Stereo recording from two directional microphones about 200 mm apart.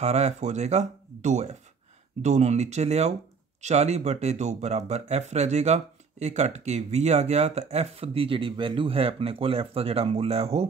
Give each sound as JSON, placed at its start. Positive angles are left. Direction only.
{"t": 0.0, "sound": "speech", "side_deg": -35}